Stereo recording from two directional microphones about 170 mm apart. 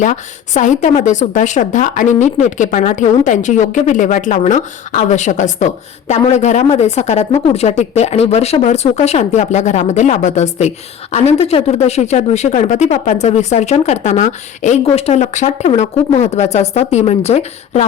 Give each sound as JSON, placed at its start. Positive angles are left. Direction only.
{"t": 0.0, "sound": "speech", "side_deg": 45}